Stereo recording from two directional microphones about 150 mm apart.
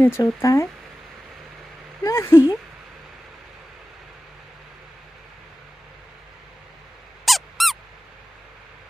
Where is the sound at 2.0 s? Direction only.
20° left (ahead or behind).